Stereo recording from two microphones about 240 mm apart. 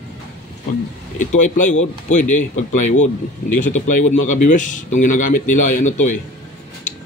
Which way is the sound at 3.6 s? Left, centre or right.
Left.